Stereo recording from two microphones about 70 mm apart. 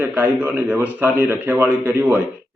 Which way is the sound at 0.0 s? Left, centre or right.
Right.